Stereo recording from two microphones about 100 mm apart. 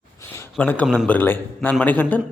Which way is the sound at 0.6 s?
15° left (ahead or behind).